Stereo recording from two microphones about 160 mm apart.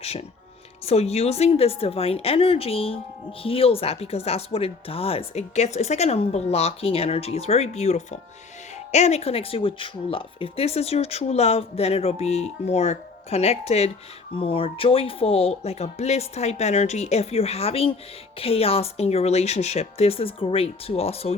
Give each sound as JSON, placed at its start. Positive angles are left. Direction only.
{"t": 0.0, "sound": "music", "side_deg": 40}
{"t": 0.9, "sound": "speech", "side_deg": 40}